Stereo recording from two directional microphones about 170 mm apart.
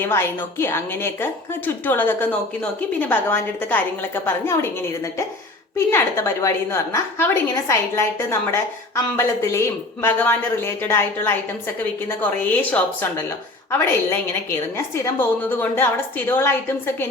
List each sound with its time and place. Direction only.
0.0 s a woman's voice: 15° left (ahead or behind)
5.7 s a woman's voice: 15° left (ahead or behind)